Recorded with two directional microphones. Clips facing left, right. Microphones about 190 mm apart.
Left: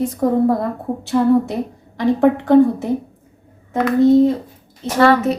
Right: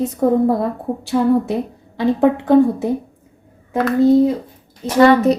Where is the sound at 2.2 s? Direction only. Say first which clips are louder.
Left 1 dB; 20° right (ahead or behind).